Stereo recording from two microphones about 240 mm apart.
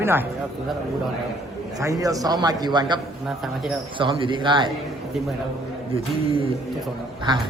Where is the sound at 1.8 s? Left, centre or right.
Centre.